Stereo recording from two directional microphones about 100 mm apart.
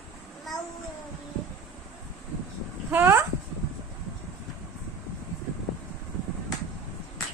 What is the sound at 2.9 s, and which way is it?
Speech, 20° right (ahead or behind).